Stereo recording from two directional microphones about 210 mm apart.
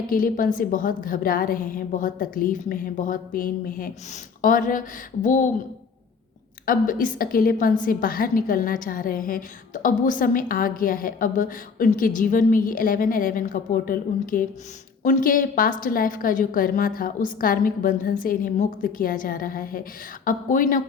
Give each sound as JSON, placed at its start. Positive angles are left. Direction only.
{"t": 0.1, "sound": "a woman's voice", "side_deg": 40}
{"t": 6.7, "sound": "a woman's voice", "side_deg": 40}